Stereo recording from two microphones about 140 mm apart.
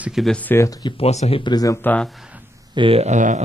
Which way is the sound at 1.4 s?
30° left (ahead or behind).